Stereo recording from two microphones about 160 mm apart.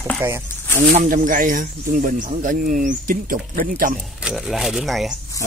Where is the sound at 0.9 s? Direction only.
55° right (ahead or behind).